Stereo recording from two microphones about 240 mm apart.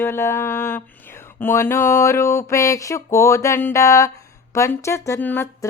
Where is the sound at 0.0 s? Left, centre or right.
Centre.